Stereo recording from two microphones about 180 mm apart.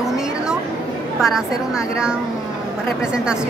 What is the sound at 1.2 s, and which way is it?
Speech, 5° right (ahead or behind).